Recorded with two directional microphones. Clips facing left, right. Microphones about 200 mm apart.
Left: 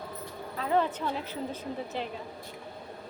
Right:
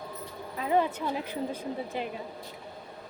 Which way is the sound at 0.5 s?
10° right (ahead or behind).